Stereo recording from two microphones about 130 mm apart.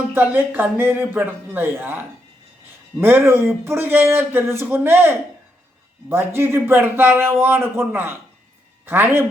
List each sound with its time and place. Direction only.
0.1 s a man's voice: 15° right (ahead or behind)